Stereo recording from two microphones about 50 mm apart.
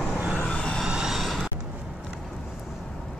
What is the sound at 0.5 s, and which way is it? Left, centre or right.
Vehicle, centre.